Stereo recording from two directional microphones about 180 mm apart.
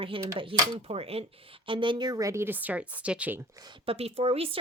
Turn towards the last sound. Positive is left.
turn(degrees=-35)  # may be behind; listen again after turning